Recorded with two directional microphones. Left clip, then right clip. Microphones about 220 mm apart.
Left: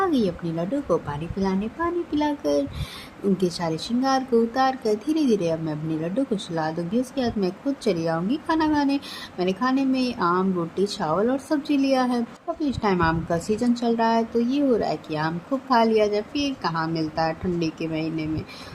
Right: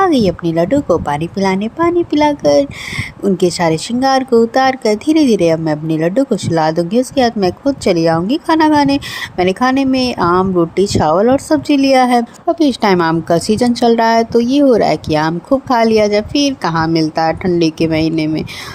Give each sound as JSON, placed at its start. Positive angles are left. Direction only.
{"t": 0.0, "sound": "speech", "side_deg": -35}